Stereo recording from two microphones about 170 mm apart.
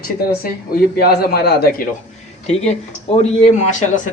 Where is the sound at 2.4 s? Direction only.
40° left (ahead or behind).